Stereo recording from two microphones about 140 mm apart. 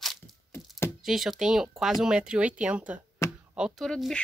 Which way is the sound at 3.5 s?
Centre (ahead or behind).